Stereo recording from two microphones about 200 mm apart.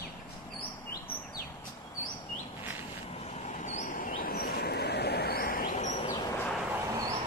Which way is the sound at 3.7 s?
40° left (ahead or behind).